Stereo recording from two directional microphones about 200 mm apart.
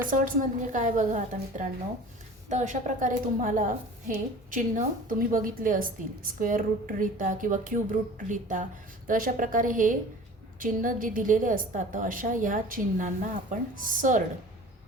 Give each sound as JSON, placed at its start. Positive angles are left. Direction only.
{"t": 0.1, "sound": "a woman's voice", "side_deg": -40}